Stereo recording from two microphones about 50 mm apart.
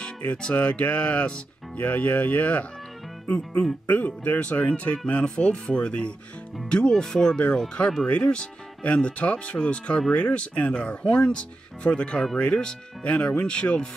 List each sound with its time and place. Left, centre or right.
0.4 s speech: left